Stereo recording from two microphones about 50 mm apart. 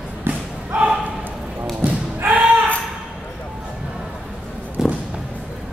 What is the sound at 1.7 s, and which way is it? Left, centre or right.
Slam, right.